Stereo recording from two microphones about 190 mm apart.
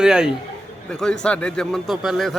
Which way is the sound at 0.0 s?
5° right (ahead or behind).